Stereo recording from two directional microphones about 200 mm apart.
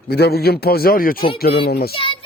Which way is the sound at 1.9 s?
25° left (ahead or behind).